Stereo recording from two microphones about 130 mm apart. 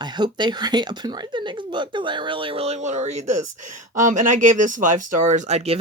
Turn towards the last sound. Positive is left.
turn(degrees=-55)  # may be behind; listen again after turning